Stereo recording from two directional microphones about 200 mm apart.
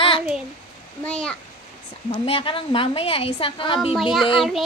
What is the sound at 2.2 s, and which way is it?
A woman's voice, 25° left (ahead or behind).